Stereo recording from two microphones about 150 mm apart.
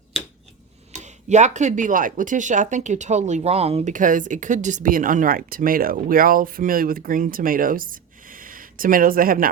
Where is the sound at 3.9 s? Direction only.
60° right (ahead or behind).